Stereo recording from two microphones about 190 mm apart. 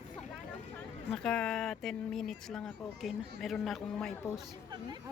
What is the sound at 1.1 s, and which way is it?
Speech, 5° left (ahead or behind).